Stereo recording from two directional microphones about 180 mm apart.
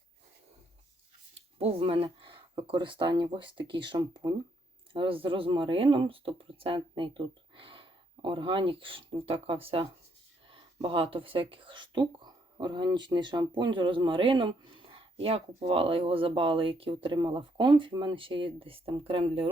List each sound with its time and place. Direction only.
1.5 s speech: 30° right (ahead or behind)